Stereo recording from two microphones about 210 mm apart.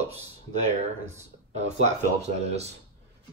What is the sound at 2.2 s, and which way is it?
Speech, 30° right (ahead or behind).